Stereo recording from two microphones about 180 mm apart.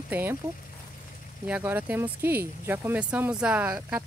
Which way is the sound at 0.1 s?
10° right (ahead or behind).